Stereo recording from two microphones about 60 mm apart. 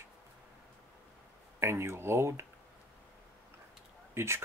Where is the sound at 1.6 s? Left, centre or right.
Right.